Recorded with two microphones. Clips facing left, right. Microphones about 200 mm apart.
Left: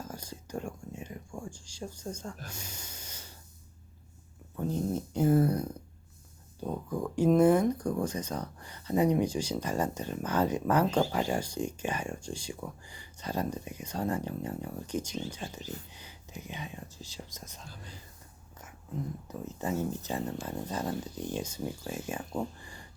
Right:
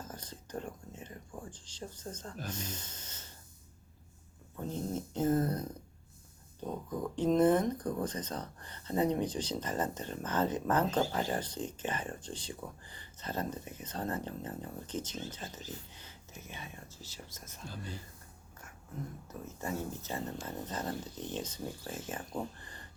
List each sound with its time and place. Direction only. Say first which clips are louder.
0.0 s whispering: left 4 dB; 10° left (ahead or behind)
4.6 s speech: left 5 dB; 10° left (ahead or behind)
19.3 s speech: left 5 dB; 15° left (ahead or behind)
22.6 s a sound: left 2 dB; 10° left (ahead or behind)